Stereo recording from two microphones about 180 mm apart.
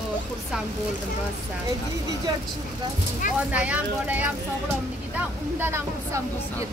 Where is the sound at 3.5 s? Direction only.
10° right (ahead or behind).